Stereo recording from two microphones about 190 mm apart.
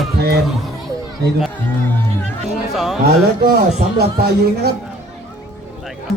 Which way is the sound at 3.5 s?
55° right (ahead or behind).